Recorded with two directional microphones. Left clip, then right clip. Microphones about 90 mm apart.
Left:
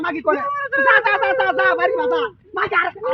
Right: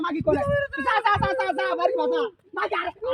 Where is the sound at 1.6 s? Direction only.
25° left (ahead or behind).